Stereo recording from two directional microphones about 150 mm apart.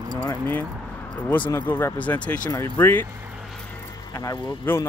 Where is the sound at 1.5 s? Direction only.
15° left (ahead or behind).